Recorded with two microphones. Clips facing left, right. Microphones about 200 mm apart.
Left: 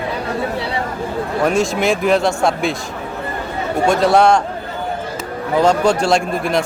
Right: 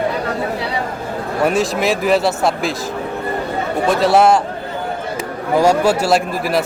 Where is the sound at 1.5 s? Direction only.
Centre (ahead or behind).